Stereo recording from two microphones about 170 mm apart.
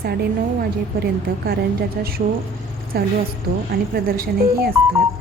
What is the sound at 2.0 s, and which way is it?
A woman's voice, 60° right (ahead or behind).